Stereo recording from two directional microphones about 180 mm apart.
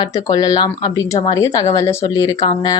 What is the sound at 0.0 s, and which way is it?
A woman's voice, 20° left (ahead or behind).